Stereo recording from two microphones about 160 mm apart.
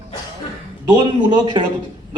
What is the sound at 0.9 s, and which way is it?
Speech, 25° right (ahead or behind).